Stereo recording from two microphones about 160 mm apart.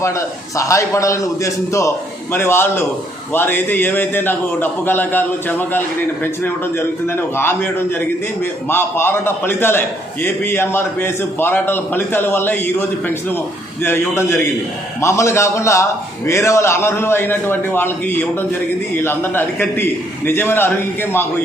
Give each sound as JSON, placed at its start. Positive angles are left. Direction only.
{"t": 0.0, "sound": "a man's voice", "side_deg": 20}